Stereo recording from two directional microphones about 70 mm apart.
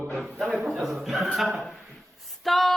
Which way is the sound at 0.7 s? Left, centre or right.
Centre.